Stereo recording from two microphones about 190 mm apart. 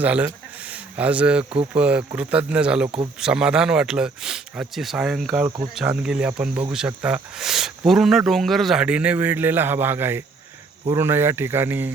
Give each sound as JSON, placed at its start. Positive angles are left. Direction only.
{"t": 0.0, "sound": "speech", "side_deg": -5}
{"t": 5.3, "sound": "speech", "side_deg": -15}
{"t": 5.7, "sound": "speech", "side_deg": -5}